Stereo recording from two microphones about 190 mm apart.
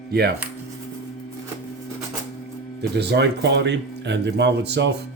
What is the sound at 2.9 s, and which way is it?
Speech, 60° right (ahead or behind).